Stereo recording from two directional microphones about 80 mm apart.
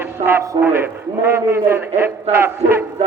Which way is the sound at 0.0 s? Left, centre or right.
Right.